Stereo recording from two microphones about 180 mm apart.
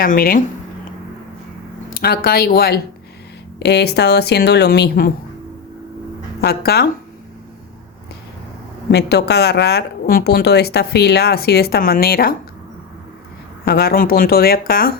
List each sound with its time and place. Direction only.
0.0 s speech: 55° left (ahead or behind)
2.0 s speech: 55° left (ahead or behind)
6.4 s speech: 60° left (ahead or behind)
8.9 s speech: 70° left (ahead or behind)
13.7 s speech: 60° left (ahead or behind)